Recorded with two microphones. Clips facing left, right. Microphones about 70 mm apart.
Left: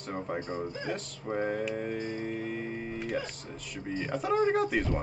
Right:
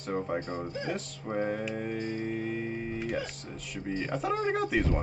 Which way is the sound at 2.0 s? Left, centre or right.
Centre.